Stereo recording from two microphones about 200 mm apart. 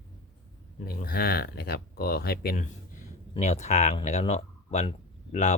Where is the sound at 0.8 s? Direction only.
45° left (ahead or behind).